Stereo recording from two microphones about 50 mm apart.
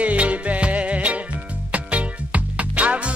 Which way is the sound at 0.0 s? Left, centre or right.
Right.